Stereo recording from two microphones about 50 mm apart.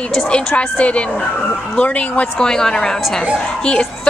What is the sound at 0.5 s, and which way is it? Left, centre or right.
A woman's voice, left.